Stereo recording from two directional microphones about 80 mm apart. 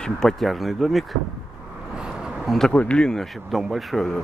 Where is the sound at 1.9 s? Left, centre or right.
Centre.